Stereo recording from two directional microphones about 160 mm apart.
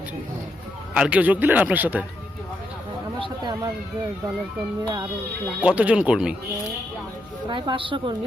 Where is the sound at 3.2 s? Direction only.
30° right (ahead or behind).